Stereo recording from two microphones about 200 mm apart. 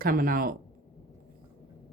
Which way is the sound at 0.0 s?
45° right (ahead or behind).